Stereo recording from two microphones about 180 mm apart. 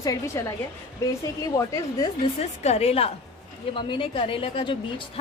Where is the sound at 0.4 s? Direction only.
15° left (ahead or behind).